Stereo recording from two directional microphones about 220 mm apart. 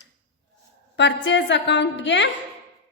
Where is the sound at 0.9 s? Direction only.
55° left (ahead or behind).